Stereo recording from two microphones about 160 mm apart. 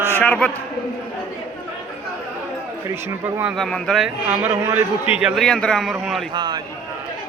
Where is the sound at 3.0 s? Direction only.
10° right (ahead or behind).